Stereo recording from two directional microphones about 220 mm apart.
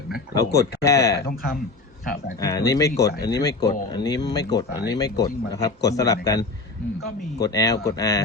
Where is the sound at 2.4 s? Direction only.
15° left (ahead or behind).